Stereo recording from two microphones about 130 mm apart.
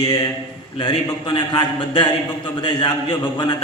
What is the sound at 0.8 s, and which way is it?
A man's voice, 40° left (ahead or behind).